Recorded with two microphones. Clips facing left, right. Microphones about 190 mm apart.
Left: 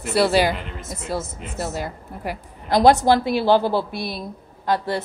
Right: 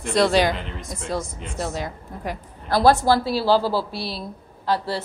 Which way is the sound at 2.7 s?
20° left (ahead or behind).